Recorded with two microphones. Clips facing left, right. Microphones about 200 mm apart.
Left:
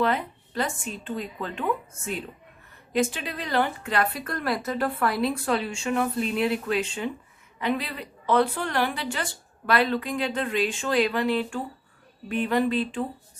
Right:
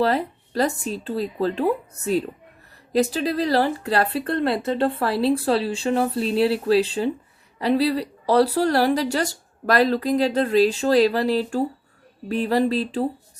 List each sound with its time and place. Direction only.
0.0 s speech: 35° right (ahead or behind)